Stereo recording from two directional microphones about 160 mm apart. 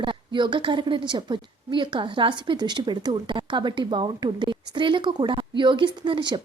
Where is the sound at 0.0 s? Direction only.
30° right (ahead or behind).